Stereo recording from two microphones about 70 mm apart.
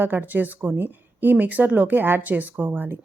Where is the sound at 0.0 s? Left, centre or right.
Right.